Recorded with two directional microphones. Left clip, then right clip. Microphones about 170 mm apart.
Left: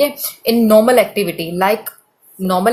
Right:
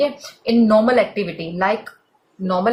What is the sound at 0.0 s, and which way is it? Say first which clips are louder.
Speech: left 4 dB; 40° left (ahead or behind).